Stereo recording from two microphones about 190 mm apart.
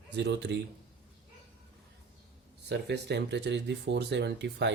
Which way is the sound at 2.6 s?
65° right (ahead or behind).